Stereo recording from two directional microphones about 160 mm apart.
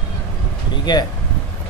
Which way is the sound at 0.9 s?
25° left (ahead or behind).